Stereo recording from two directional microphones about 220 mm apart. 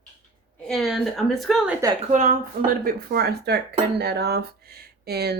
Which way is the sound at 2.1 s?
35° right (ahead or behind).